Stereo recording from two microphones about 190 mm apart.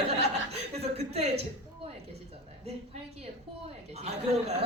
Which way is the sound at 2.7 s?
35° right (ahead or behind).